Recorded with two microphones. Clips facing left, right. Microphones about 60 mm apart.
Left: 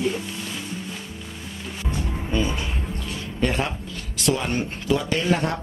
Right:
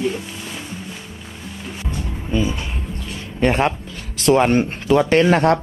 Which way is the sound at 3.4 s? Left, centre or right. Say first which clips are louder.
Right 7 dB; right.